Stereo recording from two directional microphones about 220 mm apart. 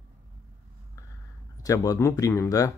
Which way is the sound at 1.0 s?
15° left (ahead or behind).